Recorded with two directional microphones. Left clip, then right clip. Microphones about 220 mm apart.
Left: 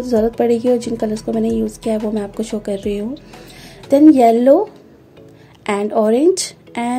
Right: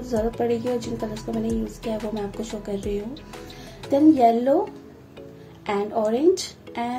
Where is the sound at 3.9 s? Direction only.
45° left (ahead or behind).